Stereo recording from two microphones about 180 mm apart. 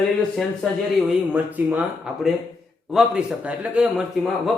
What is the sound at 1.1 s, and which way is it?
A man's voice, 10° right (ahead or behind).